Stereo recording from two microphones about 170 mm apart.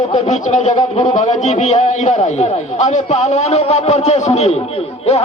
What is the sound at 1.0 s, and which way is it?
A man's voice, 40° left (ahead or behind).